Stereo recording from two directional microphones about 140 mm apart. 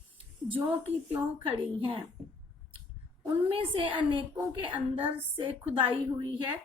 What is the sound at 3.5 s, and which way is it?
A woman's voice, 40° right (ahead or behind).